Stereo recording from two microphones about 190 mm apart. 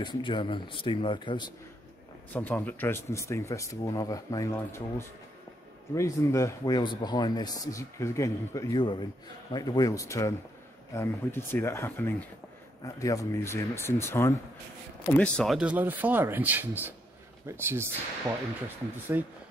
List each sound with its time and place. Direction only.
0.0 s speech: 25° left (ahead or behind)
2.3 s speech: 10° left (ahead or behind); by 17.8 s 15° right (ahead or behind)
19.1 s speech: 10° right (ahead or behind)